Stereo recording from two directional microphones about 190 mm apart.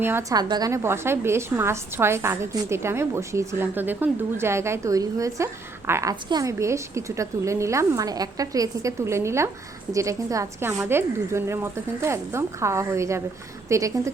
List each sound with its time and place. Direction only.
0.0 s a woman's voice: 15° right (ahead or behind)